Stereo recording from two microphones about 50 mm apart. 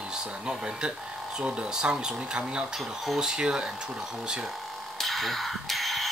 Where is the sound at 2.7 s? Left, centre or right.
Centre.